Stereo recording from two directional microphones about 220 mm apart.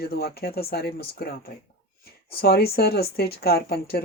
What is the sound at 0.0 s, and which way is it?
Speech, 45° left (ahead or behind).